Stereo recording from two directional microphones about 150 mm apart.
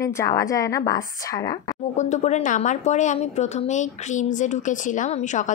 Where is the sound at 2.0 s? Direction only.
50° left (ahead or behind).